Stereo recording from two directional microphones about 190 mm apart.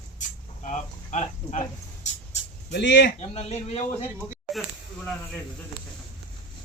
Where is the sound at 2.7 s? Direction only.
65° left (ahead or behind).